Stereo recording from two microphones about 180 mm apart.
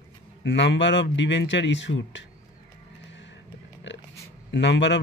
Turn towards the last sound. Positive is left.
turn(degrees=80)